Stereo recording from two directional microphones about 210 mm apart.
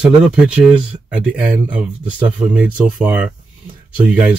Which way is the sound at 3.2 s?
5° right (ahead or behind).